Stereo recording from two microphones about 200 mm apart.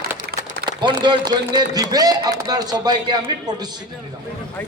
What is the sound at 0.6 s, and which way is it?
A man's voice, 25° right (ahead or behind).